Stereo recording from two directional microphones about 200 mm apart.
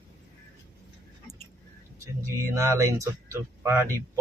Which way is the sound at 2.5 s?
15° right (ahead or behind).